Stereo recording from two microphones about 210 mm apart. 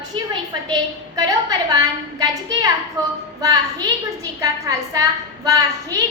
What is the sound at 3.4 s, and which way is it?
A woman's voice, 15° right (ahead or behind).